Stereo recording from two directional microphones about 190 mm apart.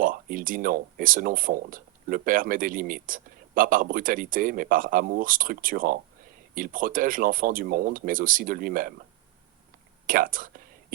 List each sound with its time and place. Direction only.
0.0 s speech: 45° right (ahead or behind)
10.1 s speech: 45° right (ahead or behind)